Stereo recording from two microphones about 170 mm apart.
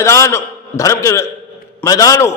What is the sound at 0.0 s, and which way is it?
A man's voice, 15° left (ahead or behind).